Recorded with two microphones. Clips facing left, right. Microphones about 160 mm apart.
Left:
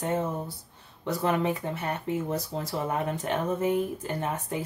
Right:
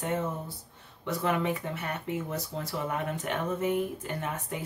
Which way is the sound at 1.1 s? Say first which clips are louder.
Left 2 dB; 35° left (ahead or behind).